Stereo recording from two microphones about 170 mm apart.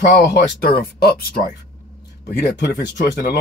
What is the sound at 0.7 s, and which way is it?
Speech, 65° left (ahead or behind).